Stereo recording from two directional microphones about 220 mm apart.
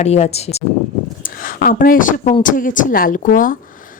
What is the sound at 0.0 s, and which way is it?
Speech, 30° left (ahead or behind).